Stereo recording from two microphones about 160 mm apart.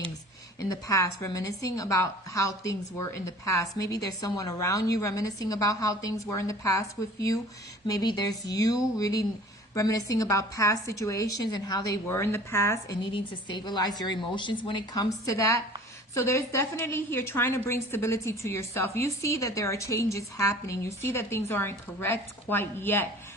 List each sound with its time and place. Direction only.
0.6 s a woman's voice: 20° left (ahead or behind)
13.1 s a woman's voice: 25° left (ahead or behind)